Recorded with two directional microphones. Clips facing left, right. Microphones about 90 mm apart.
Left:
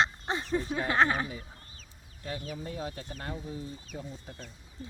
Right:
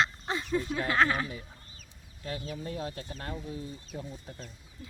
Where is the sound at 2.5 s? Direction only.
5° left (ahead or behind).